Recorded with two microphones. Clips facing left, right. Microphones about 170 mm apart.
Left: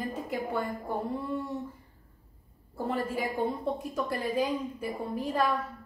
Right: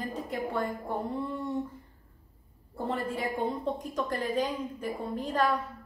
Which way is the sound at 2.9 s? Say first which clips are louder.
Left 1 dB; 10° left (ahead or behind).